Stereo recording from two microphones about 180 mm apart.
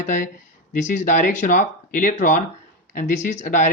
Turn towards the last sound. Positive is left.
turn(degrees=45)  # may be behind; listen again after turning